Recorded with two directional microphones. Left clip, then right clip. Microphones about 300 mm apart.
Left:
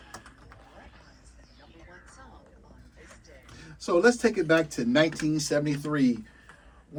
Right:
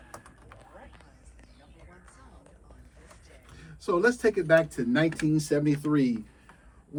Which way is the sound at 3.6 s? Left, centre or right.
Left.